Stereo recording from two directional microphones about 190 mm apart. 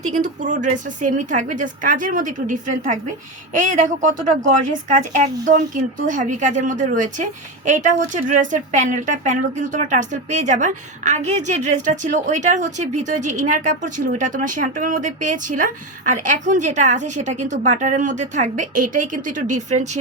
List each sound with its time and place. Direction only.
0.0 s a woman's voice: 40° right (ahead or behind)